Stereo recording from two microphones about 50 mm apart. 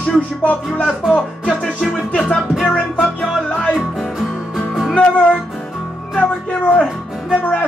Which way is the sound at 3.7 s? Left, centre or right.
Centre.